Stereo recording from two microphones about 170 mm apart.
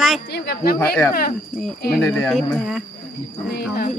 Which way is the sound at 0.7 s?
15° left (ahead or behind).